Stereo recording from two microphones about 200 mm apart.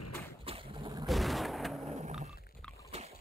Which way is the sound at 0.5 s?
30° right (ahead or behind).